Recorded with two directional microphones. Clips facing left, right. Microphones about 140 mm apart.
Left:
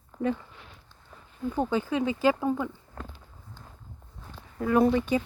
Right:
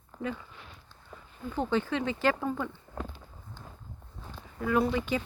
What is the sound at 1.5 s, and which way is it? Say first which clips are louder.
Speech: left 2 dB; 10° left (ahead or behind).